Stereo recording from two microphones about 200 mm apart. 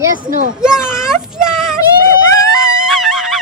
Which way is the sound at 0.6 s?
5° right (ahead or behind).